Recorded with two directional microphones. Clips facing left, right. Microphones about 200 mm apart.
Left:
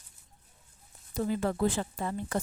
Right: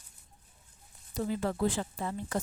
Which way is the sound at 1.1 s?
55° left (ahead or behind).